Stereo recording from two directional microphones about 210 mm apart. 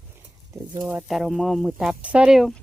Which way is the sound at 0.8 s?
10° right (ahead or behind).